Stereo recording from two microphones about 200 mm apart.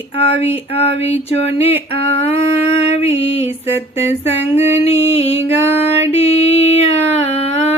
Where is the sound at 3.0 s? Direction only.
30° left (ahead or behind).